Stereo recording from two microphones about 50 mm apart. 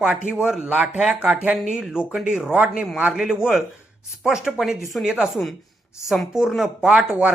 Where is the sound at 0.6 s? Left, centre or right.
Right; by 5.2 s centre.